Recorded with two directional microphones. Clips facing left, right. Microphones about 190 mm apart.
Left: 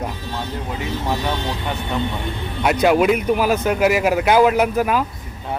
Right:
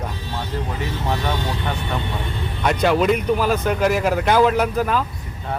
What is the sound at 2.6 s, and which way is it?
Speech, 10° left (ahead or behind).